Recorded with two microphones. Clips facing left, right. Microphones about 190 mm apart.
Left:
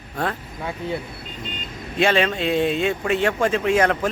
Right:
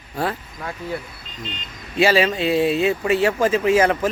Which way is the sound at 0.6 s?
25° left (ahead or behind).